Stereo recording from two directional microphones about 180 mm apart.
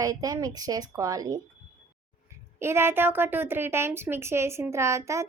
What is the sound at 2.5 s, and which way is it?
A woman's voice, 15° right (ahead or behind).